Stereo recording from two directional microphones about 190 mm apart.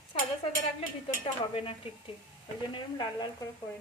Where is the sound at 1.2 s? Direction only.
25° left (ahead or behind).